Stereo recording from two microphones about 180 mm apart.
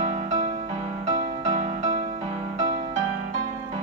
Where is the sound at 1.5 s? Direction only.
35° right (ahead or behind).